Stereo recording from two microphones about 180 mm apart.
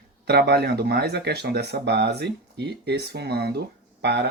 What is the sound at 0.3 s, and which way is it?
Speech, 65° right (ahead or behind).